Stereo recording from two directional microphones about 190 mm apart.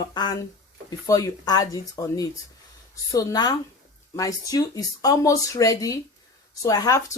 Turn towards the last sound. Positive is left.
turn(degrees=20)  # may be behind; listen again after turning